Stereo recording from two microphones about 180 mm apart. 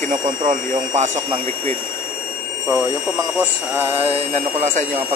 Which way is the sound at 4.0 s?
35° right (ahead or behind).